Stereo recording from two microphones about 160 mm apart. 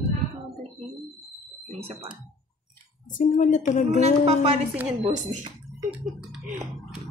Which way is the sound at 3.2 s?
50° left (ahead or behind).